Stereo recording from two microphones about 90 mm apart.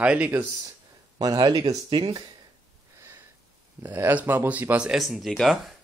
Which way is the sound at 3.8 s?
25° right (ahead or behind).